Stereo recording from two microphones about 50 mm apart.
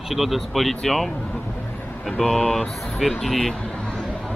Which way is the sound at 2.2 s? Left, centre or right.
Centre.